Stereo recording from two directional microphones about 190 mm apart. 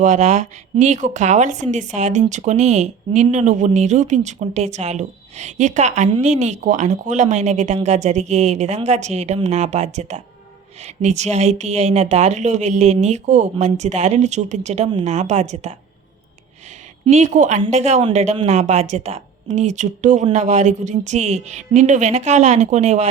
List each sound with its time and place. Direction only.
0.0 s speech: 40° right (ahead or behind)
17.1 s speech: 40° right (ahead or behind)